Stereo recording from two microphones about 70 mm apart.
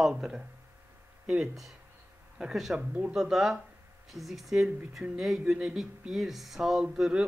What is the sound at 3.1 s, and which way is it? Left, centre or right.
Speech, centre.